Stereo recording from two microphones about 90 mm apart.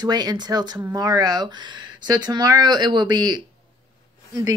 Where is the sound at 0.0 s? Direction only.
50° right (ahead or behind).